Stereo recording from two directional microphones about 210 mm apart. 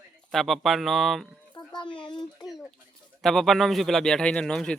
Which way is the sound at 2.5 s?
Centre (ahead or behind).